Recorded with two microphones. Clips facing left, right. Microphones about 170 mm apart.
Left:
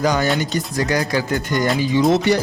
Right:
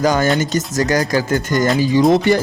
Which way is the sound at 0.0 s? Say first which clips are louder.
Right 3 dB; 45° right (ahead or behind).